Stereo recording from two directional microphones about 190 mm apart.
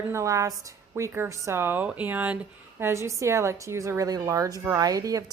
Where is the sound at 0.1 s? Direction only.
15° right (ahead or behind).